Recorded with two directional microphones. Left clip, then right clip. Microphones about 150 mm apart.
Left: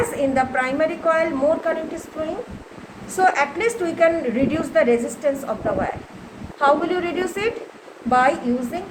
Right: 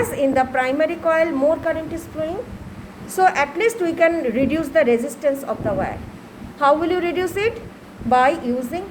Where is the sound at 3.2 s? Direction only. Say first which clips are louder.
Right 1 dB; 55° right (ahead or behind).